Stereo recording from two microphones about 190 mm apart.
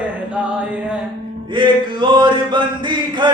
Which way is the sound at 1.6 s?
25° right (ahead or behind).